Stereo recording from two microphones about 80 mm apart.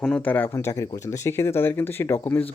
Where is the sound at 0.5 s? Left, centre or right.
Left.